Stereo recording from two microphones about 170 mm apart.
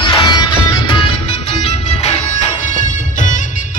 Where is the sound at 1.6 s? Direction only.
40° left (ahead or behind).